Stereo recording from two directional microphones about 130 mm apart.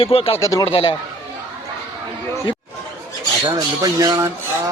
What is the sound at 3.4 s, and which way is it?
Speech, 30° right (ahead or behind).